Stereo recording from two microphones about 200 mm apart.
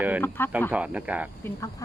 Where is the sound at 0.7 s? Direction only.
5° right (ahead or behind).